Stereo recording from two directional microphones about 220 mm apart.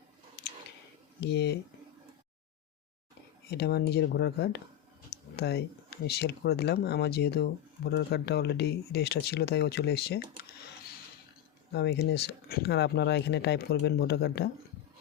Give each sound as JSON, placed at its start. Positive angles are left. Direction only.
{"t": 1.2, "sound": "speech", "side_deg": 50}
{"t": 3.5, "sound": "speech", "side_deg": 45}
{"t": 11.7, "sound": "speech", "side_deg": 50}